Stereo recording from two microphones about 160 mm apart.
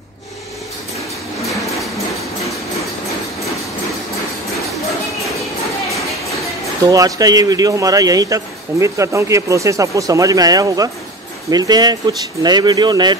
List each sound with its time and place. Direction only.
6.8 s a man's voice: 20° right (ahead or behind)